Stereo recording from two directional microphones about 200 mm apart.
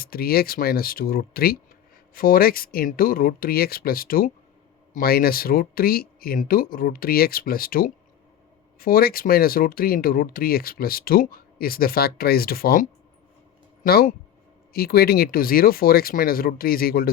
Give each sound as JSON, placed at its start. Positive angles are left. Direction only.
{"t": 0.0, "sound": "speech", "side_deg": 50}